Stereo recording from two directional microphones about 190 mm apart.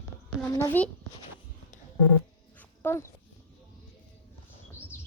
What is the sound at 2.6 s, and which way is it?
Dog, 10° left (ahead or behind).